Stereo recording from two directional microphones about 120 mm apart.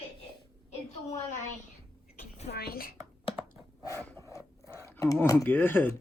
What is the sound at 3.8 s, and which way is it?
Wood, 25° left (ahead or behind).